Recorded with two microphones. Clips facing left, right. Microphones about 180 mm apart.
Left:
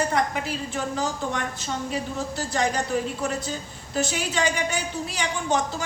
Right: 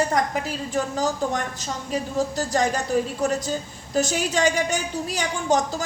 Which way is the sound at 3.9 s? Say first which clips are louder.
Right 4 dB; 45° right (ahead or behind).